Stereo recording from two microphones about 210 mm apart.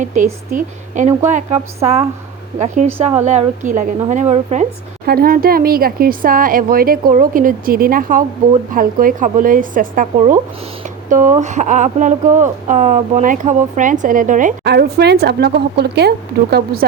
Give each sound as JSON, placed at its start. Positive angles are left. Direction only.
{"t": 0.0, "sound": "speech", "side_deg": -35}
{"t": 5.0, "sound": "speech", "side_deg": -45}
{"t": 14.6, "sound": "speech", "side_deg": -50}